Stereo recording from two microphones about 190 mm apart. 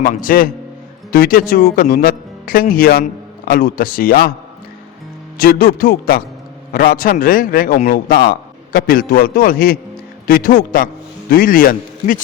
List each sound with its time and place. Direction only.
0.0 s speech: 45° left (ahead or behind)
5.4 s speech: 50° left (ahead or behind)